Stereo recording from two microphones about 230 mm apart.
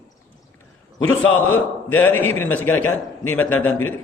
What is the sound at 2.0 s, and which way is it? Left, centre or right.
A man's voice, centre.